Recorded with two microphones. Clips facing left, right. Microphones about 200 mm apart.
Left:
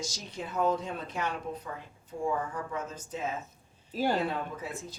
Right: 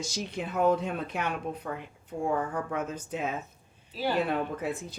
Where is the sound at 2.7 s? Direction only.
60° right (ahead or behind).